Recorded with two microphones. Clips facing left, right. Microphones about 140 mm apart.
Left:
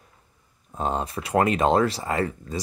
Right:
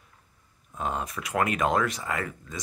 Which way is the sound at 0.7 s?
30° left (ahead or behind).